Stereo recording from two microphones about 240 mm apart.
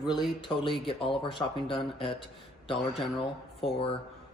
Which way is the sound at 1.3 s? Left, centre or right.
Left.